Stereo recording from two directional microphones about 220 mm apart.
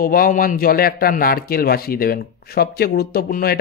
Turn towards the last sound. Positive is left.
turn(degrees=40)  # may be behind; listen again after turning